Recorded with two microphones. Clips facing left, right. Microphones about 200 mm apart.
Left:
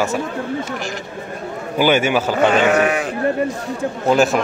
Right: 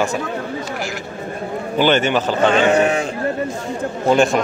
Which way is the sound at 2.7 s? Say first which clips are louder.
Right 1 dB; 25° right (ahead or behind).